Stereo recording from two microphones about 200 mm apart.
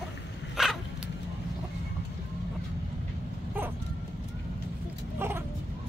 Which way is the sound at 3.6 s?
10° right (ahead or behind).